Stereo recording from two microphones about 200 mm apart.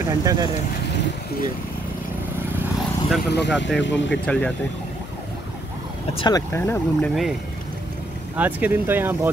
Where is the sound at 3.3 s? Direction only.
60° left (ahead or behind).